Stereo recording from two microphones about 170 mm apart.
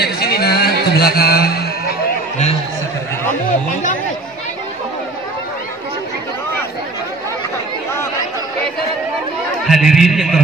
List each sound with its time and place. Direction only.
0.0 s music: 70° left (ahead or behind)
9.7 s a man's voice: centre (ahead or behind)